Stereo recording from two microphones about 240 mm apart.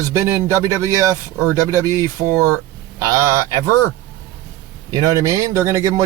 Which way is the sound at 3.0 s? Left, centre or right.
Centre.